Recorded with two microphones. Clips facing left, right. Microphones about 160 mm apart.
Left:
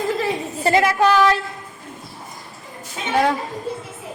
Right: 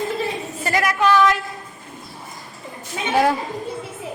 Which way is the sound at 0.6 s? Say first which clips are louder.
Left 3 dB; 25° left (ahead or behind).